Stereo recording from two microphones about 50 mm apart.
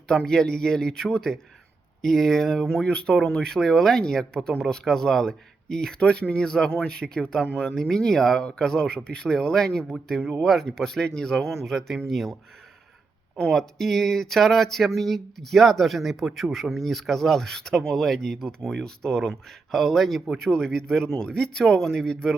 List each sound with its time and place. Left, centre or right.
0.3 s speech: centre
13.5 s speech: centre